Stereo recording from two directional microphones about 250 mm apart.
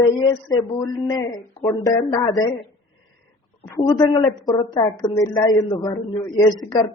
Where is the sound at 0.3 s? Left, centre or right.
Centre.